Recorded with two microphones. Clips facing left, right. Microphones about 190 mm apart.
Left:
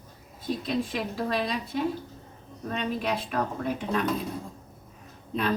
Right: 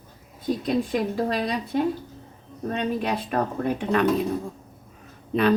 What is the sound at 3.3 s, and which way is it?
Speech, 65° right (ahead or behind).